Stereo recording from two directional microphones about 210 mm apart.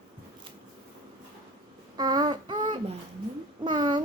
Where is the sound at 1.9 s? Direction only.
20° right (ahead or behind).